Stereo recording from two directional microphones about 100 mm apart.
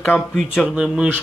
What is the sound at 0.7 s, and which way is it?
Speech, 10° right (ahead or behind).